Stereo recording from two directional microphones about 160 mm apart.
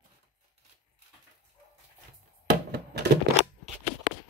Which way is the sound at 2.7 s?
90° right.